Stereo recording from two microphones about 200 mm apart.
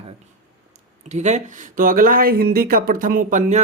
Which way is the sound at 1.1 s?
35° right (ahead or behind).